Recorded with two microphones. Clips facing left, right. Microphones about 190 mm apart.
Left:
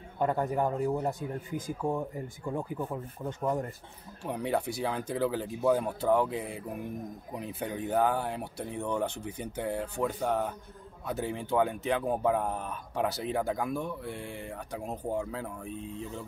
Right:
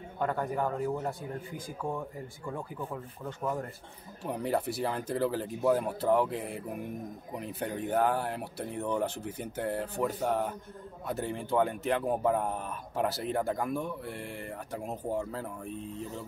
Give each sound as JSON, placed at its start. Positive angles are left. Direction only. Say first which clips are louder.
{"t": 0.2, "sound": "speech", "louder": "left 3 dB", "side_deg": 20}
{"t": 4.2, "sound": "speech", "louder": "even", "side_deg": 0}